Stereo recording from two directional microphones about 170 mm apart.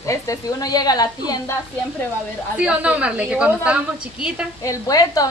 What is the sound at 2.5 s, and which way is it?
A woman's voice, 5° right (ahead or behind).